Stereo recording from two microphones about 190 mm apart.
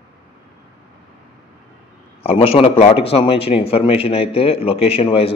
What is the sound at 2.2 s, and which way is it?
A man's voice, 30° left (ahead or behind).